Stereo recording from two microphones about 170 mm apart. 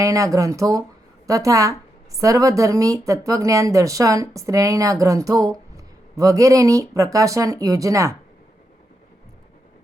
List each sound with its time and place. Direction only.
0.0 s speech: 20° right (ahead or behind)